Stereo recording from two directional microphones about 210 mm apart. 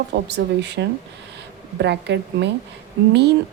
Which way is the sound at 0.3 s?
55° right (ahead or behind).